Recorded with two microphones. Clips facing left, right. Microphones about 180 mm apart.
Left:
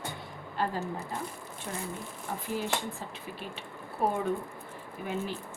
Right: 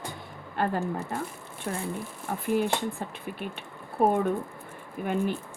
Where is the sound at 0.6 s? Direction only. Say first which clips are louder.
Right 4 dB; 55° right (ahead or behind).